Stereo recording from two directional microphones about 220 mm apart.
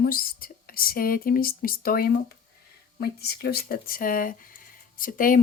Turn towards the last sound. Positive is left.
turn(degrees=40)  # may be behind; listen again after turning